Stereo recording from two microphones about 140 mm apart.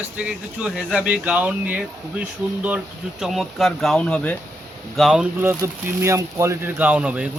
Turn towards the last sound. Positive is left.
turn(degrees=-10)  # may be behind; listen again after turning